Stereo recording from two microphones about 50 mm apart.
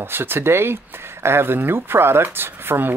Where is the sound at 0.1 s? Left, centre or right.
Right.